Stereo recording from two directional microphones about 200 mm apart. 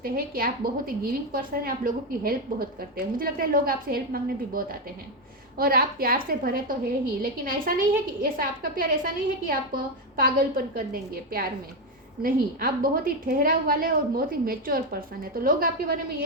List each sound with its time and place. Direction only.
0.0 s a woman's voice: 45° right (ahead or behind)